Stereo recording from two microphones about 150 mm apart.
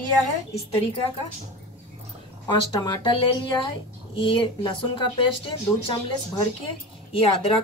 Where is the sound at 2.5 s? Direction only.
30° left (ahead or behind).